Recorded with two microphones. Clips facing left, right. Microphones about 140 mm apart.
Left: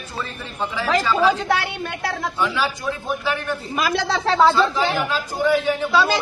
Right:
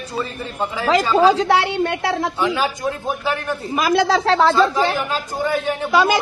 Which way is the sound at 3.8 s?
50° right (ahead or behind).